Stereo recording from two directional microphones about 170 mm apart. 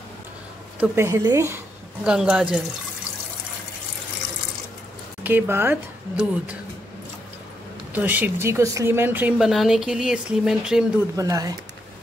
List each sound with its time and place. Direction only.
0.7 s speech: 15° right (ahead or behind)
2.0 s speech: 5° right (ahead or behind)
5.2 s speech: 15° right (ahead or behind)
7.9 s speech: 10° right (ahead or behind)
11.1 s speech: 20° right (ahead or behind)